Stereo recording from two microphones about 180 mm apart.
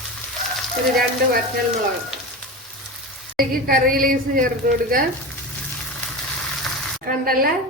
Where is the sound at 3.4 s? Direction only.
55° right (ahead or behind).